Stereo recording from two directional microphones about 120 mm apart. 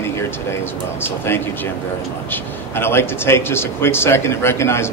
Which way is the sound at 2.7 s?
20° left (ahead or behind).